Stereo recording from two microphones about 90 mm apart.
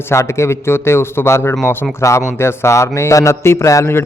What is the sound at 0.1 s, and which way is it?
A man's voice, 30° left (ahead or behind).